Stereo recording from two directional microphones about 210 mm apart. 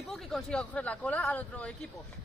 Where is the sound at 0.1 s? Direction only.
5° left (ahead or behind).